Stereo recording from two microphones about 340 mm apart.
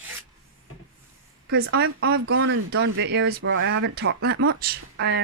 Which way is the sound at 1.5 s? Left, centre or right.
Right.